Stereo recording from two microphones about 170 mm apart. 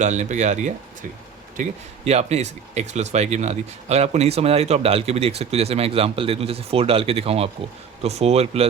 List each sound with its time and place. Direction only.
0.0 s speech: 45° right (ahead or behind)